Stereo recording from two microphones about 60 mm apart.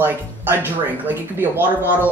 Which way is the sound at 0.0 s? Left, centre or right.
Right.